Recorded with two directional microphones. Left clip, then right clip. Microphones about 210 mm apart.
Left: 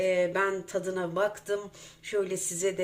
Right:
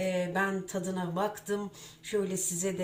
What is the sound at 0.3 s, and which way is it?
Speech, 50° left (ahead or behind).